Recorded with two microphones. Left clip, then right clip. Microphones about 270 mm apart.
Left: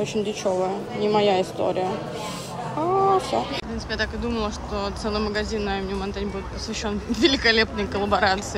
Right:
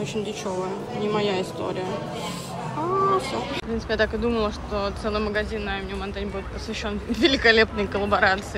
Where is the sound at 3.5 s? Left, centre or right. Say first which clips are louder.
Right 3 dB; centre.